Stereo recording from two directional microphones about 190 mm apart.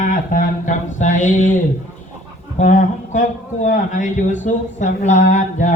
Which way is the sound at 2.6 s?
40° left (ahead or behind).